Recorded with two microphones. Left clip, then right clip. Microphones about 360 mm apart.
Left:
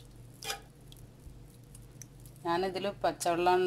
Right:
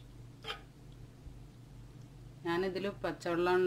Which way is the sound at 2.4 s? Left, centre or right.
Centre.